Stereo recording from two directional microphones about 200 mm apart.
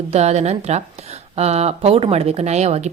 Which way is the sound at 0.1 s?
35° right (ahead or behind).